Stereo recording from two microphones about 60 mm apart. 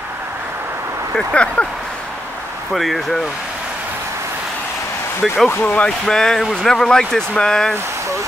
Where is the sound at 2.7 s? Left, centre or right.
Centre.